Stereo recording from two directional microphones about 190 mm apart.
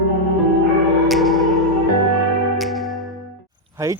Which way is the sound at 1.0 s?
Centre (ahead or behind).